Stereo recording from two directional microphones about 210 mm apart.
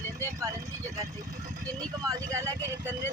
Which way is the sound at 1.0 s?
35° right (ahead or behind).